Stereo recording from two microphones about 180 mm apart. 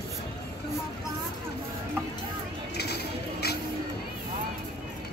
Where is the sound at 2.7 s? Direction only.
65° left (ahead or behind).